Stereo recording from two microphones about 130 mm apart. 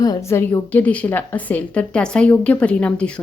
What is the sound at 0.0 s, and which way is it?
A woman's voice, 25° left (ahead or behind).